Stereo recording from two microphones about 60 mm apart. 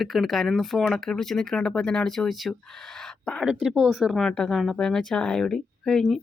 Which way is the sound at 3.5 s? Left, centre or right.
Centre.